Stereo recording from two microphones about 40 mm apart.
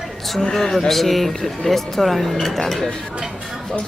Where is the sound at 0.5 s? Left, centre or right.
Centre.